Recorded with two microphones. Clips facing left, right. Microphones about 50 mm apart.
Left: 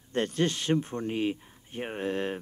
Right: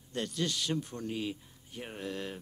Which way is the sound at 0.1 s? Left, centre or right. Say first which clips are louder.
Left 7 dB; left.